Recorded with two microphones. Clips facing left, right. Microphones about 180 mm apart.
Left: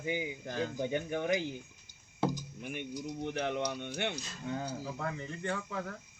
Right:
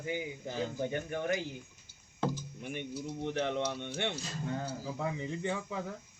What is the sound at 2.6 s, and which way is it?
Speech, 10° left (ahead or behind).